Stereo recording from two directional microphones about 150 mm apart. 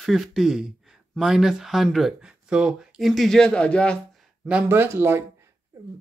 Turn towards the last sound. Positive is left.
turn(degrees=-15)  # may be behind; listen again after turning